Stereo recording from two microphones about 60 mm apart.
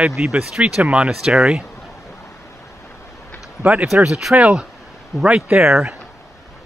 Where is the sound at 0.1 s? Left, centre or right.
Centre.